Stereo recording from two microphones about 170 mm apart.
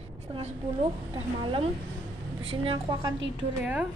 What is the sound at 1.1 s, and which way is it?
A woman's voice, 30° right (ahead or behind).